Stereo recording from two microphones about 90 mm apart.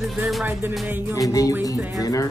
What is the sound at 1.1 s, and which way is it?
Speech, 40° left (ahead or behind).